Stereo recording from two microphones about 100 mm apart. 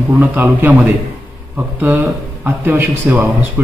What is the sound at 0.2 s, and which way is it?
A man's voice, 20° right (ahead or behind).